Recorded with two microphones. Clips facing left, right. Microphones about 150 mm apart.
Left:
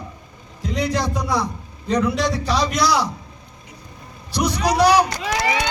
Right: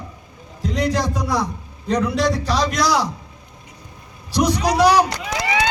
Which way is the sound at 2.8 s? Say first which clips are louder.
Even; 45° right (ahead or behind).